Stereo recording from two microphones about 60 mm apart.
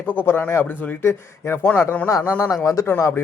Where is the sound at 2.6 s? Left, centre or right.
Left.